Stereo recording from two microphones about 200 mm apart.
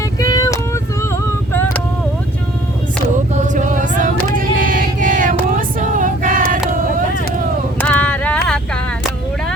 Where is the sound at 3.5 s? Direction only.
40° right (ahead or behind).